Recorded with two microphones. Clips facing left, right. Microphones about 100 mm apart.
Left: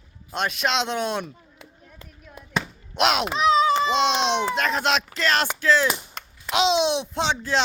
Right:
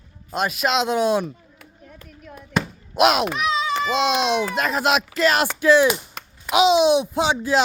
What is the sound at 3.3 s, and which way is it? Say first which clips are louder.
Speech: left 4 dB; 25° left (ahead or behind).